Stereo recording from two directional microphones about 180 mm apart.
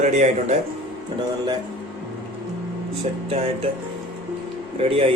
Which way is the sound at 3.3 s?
35° right (ahead or behind).